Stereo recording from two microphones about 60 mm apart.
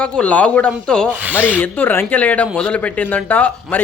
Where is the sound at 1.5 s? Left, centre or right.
Left.